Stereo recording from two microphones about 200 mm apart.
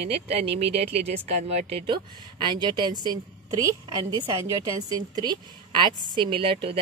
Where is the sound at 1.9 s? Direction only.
25° right (ahead or behind).